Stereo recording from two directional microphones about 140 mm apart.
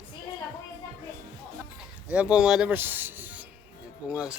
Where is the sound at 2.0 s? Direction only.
5° right (ahead or behind).